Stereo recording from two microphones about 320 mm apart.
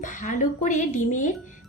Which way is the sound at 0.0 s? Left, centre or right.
Left.